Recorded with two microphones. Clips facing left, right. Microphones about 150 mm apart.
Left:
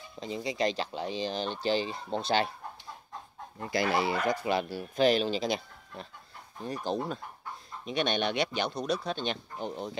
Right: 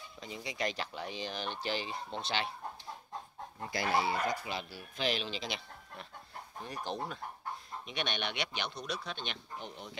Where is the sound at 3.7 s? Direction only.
90° left; by 9.9 s 40° left (ahead or behind).